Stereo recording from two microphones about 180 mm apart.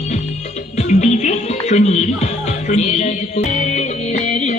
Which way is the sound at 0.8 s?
40° left (ahead or behind).